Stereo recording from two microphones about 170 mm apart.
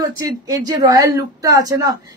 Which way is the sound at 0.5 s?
20° right (ahead or behind).